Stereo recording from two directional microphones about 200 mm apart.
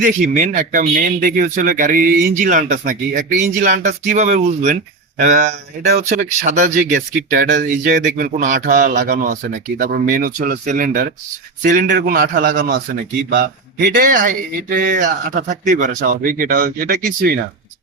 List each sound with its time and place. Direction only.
0.0 s speech: 40° right (ahead or behind)